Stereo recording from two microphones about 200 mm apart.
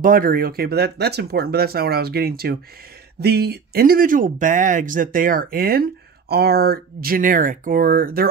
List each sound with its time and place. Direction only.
0.0 s speech: 45° right (ahead or behind)